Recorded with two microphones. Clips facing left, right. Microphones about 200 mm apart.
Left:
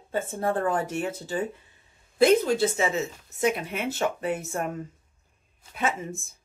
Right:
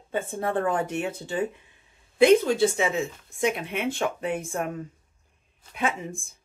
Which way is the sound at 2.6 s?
Centre (ahead or behind).